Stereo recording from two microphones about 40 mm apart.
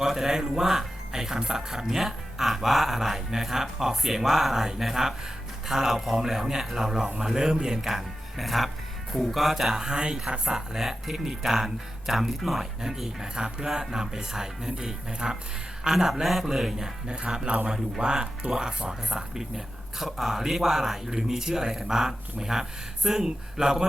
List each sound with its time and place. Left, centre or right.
0.0 s speech: centre
7.8 s speech: centre
9.9 s speech: right